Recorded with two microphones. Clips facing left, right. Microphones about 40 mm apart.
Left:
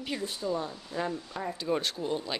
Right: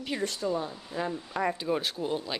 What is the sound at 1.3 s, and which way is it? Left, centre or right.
Speech, centre.